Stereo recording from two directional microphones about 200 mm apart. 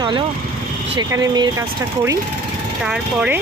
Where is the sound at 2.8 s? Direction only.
5° right (ahead or behind).